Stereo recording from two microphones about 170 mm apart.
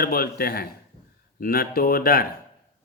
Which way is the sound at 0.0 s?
60° left (ahead or behind).